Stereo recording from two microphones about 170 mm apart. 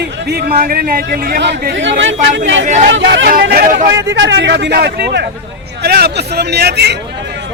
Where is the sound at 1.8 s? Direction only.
90° right.